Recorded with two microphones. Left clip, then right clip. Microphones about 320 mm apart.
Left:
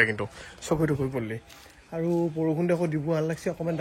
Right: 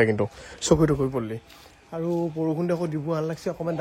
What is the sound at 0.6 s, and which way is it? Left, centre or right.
Speech, right.